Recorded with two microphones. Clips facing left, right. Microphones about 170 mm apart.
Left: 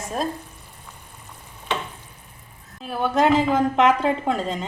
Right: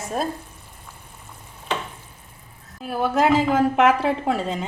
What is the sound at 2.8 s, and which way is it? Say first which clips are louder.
Speech: even; 5° right (ahead or behind).